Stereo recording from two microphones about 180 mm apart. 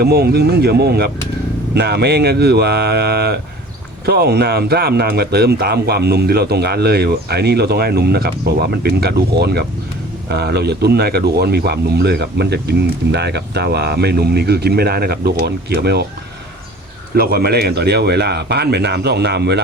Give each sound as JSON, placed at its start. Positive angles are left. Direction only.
{"t": 0.0, "sound": "speech", "side_deg": -60}
{"t": 17.2, "sound": "speech", "side_deg": -60}